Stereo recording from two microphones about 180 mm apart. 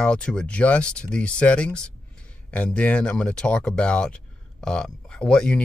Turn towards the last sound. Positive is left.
turn(degrees=5)  # may be behind; listen again after turning